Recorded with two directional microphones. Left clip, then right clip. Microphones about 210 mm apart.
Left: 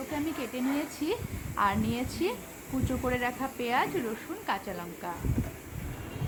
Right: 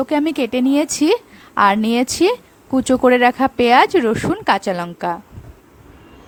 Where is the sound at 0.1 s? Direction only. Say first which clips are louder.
Right 16 dB; 55° right (ahead or behind).